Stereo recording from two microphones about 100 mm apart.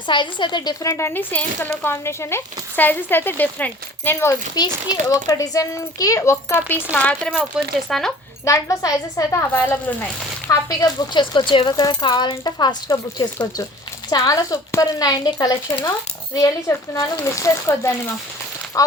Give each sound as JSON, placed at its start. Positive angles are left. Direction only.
{"t": 0.1, "sound": "speech", "side_deg": 50}
{"t": 4.5, "sound": "speech", "side_deg": 45}
{"t": 7.3, "sound": "speech", "side_deg": 0}
{"t": 8.4, "sound": "speech", "side_deg": 35}
{"t": 10.5, "sound": "speech", "side_deg": 40}